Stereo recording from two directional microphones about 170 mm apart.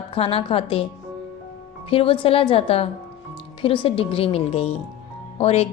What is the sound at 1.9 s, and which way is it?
A woman's voice, 35° left (ahead or behind).